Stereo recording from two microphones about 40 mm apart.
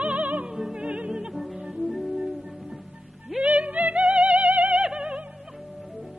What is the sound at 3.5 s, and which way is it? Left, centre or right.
Music, right.